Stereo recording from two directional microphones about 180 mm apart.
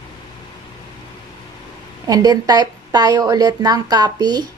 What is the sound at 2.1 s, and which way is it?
Speech, 20° right (ahead or behind).